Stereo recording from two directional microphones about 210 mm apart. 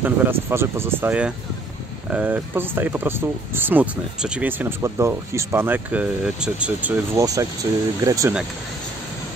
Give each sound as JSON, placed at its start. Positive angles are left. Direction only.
{"t": 0.0, "sound": "speech", "side_deg": -10}